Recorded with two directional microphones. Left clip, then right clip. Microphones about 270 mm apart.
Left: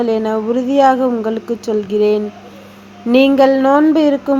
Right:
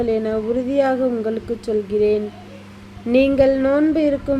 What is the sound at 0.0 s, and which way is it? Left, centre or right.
Speech, centre.